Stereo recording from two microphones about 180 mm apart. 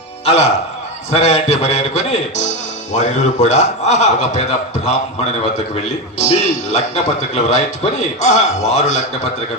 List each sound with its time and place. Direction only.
0.3 s a man's voice: 40° left (ahead or behind)
6.1 s a man's voice: 40° left (ahead or behind)